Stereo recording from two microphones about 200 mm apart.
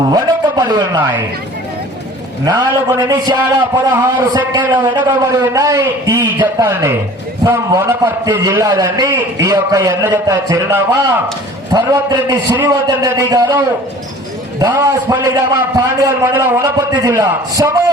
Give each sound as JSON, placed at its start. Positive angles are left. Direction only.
{"t": 0.0, "sound": "a man's voice", "side_deg": -20}
{"t": 2.4, "sound": "a man's voice", "side_deg": -20}